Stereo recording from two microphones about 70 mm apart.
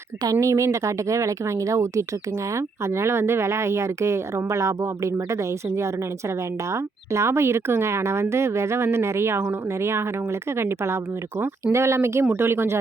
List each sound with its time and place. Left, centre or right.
0.3 s a woman's voice: right